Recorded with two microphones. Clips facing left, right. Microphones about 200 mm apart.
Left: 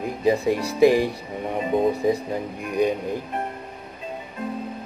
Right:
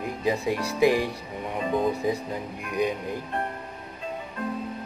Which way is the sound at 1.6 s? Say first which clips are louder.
Left 4 dB; 20° left (ahead or behind).